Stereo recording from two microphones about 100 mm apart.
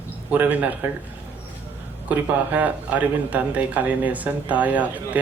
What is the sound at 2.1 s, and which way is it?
Speech, 15° right (ahead or behind).